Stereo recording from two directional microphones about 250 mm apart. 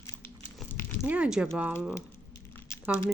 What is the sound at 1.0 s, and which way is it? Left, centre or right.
Speech, centre.